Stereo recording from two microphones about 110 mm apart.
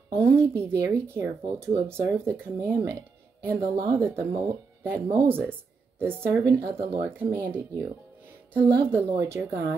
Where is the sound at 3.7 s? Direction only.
45° right (ahead or behind).